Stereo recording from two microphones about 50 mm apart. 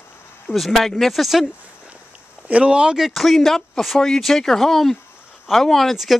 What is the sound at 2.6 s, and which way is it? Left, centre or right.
Speech, centre.